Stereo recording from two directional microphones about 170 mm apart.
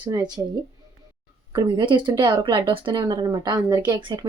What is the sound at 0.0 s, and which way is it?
Speech, 25° right (ahead or behind).